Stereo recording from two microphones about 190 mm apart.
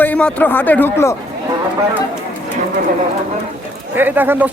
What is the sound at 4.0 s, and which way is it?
Speech, 10° right (ahead or behind).